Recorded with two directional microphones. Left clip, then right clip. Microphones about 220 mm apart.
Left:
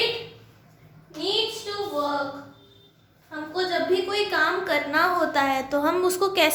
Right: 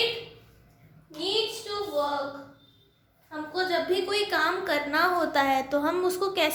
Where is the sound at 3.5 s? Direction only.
40° right (ahead or behind).